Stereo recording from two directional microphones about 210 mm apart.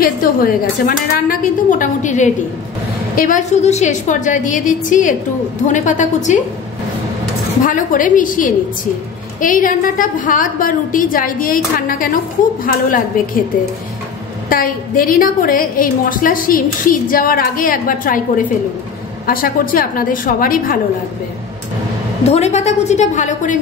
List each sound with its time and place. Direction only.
0.0 s a woman's voice: 40° left (ahead or behind)
7.6 s a woman's voice: 40° left (ahead or behind)
14.5 s a woman's voice: 40° left (ahead or behind)
19.2 s a woman's voice: 40° left (ahead or behind)
22.2 s a woman's voice: 30° left (ahead or behind)